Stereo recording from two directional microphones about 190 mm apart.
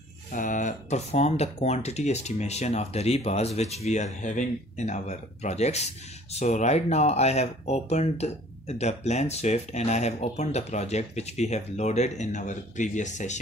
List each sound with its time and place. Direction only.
0.3 s speech: 45° left (ahead or behind)